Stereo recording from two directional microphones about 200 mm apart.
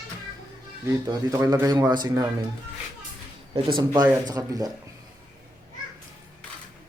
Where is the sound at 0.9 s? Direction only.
15° right (ahead or behind).